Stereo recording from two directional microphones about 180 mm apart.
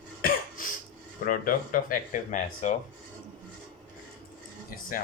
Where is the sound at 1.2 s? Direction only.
50° left (ahead or behind).